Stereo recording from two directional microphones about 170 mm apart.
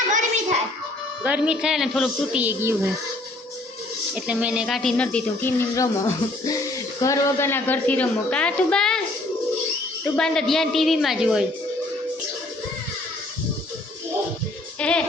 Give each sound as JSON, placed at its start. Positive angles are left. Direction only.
{"t": 0.1, "sound": "hands", "side_deg": -45}
{"t": 1.2, "sound": "a woman's voice", "side_deg": -5}
{"t": 4.1, "sound": "a woman's voice", "side_deg": -5}
{"t": 10.0, "sound": "a woman's voice", "side_deg": 5}
{"t": 14.8, "sound": "music", "side_deg": 5}